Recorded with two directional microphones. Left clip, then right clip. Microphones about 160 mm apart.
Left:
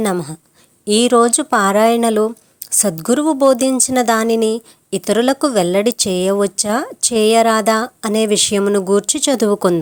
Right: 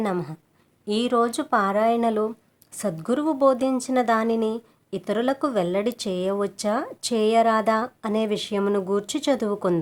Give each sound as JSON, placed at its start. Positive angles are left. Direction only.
{"t": 0.0, "sound": "a woman's voice", "side_deg": 40}